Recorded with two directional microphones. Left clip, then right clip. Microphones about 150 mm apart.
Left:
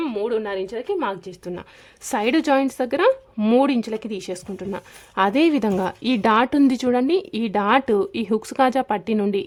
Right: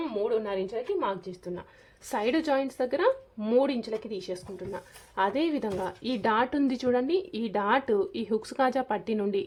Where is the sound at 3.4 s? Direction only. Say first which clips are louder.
Left 6 dB; 65° left (ahead or behind).